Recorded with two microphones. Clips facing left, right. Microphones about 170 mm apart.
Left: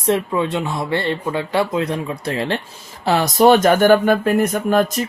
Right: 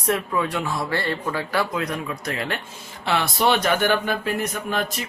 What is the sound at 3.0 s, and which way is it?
Speech, 40° left (ahead or behind).